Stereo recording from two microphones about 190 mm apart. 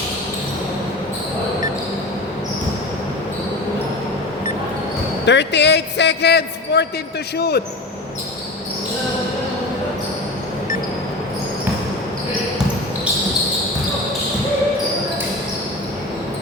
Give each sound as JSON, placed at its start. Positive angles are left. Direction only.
{"t": 5.2, "sound": "a man's voice", "side_deg": 65}